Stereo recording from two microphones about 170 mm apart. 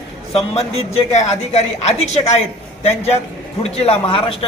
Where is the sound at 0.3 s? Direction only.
35° left (ahead or behind).